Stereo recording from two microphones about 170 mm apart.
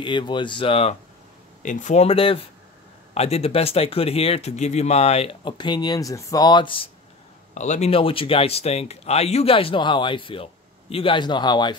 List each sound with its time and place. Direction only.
0.0 s speech: 30° left (ahead or behind)
1.6 s speech: 50° left (ahead or behind); by 6.9 s 30° left (ahead or behind)
7.5 s speech: 45° left (ahead or behind); by 11.7 s 25° left (ahead or behind)